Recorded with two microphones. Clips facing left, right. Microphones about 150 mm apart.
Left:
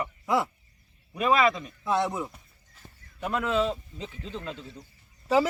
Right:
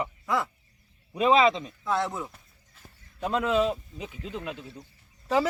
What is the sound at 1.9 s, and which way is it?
Speech, 15° left (ahead or behind).